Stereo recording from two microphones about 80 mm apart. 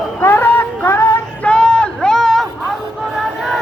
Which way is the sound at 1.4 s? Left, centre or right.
Centre.